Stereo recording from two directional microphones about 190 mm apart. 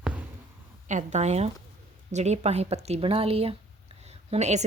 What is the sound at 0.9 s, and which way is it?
A woman's voice, 40° right (ahead or behind).